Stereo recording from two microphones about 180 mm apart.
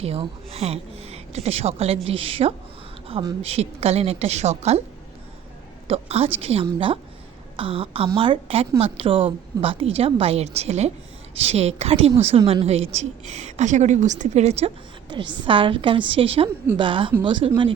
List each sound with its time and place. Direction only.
0.0 s a woman's voice: 35° right (ahead or behind)
5.9 s a woman's voice: 35° right (ahead or behind)
15.1 s a woman's voice: 25° right (ahead or behind)